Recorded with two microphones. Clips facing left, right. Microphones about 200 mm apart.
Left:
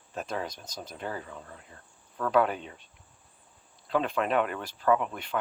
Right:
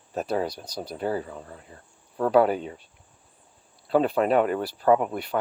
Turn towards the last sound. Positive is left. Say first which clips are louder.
# right 5 dB
turn(degrees=-40)  # may be behind; listen again after turning